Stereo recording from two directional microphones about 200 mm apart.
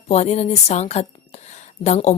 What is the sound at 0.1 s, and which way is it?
Speech, 35° left (ahead or behind).